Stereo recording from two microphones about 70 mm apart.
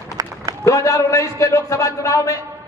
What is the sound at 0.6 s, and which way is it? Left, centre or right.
A man's voice, left.